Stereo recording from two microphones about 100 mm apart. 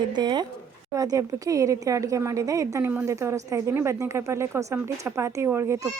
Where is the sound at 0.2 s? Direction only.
45° right (ahead or behind).